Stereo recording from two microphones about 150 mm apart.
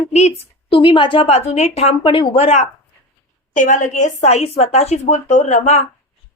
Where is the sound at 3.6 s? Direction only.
60° left (ahead or behind).